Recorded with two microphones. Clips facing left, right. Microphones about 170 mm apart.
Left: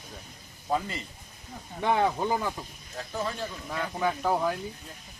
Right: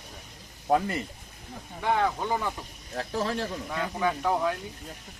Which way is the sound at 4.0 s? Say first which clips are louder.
Even; 5° left (ahead or behind).